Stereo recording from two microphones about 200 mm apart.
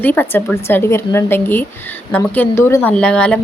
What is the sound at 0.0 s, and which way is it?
Speech, 10° left (ahead or behind).